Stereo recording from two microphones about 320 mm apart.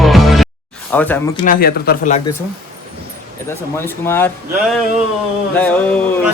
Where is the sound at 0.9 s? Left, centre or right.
Centre.